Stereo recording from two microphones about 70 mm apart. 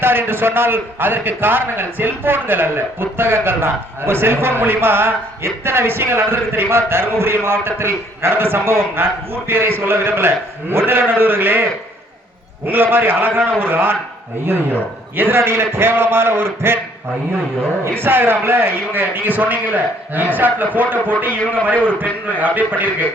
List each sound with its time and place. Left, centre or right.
0.0 s a man's voice: right
15.4 s a man's voice: right
17.8 s a man's voice: right
21.8 s a man's voice: right